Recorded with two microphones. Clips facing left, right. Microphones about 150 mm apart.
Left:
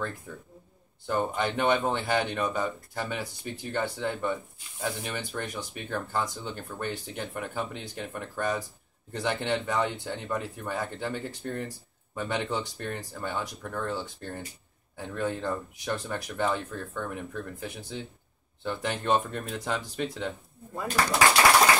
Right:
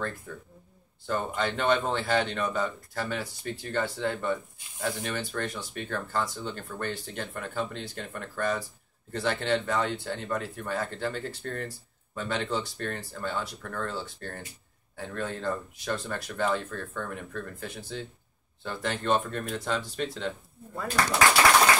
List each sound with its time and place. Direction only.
1.0 s speech: 15° left (ahead or behind)